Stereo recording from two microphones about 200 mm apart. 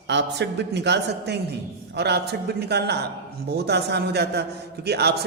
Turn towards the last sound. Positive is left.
turn(degrees=-55)  # may be behind; listen again after turning